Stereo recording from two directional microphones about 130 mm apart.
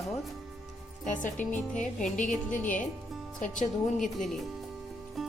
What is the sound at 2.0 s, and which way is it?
Speech, 80° left.